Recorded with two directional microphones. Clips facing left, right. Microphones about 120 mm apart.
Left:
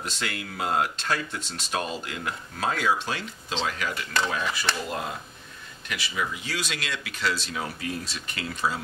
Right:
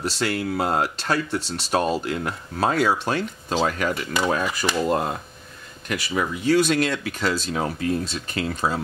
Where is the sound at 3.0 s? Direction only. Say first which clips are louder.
Right 7 dB; 50° right (ahead or behind).